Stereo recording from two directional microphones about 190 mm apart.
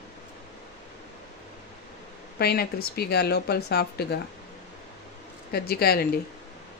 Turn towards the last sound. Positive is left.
turn(degrees=55)  # may be behind; listen again after turning